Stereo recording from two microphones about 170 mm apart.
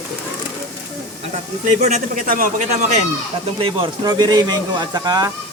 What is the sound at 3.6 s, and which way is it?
Speech, 25° right (ahead or behind).